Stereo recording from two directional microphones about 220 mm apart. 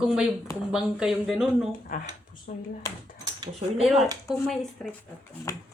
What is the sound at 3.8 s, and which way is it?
Speech, centre (ahead or behind).